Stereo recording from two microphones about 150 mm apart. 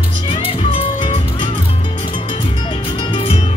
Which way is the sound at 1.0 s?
30° left (ahead or behind).